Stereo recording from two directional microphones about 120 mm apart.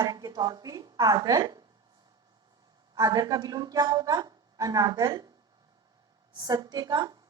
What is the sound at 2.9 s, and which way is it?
A woman's voice, 30° right (ahead or behind).